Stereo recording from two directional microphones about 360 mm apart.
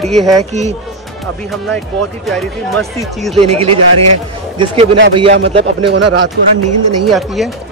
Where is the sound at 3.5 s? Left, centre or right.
Centre.